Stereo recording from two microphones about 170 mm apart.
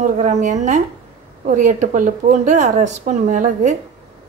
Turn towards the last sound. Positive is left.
turn(degrees=-45)  # may be behind; listen again after turning